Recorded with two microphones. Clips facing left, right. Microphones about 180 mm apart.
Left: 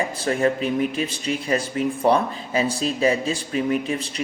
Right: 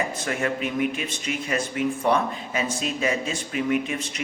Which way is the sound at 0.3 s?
35° left (ahead or behind).